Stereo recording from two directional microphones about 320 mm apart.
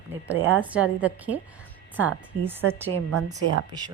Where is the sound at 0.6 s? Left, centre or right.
Centre.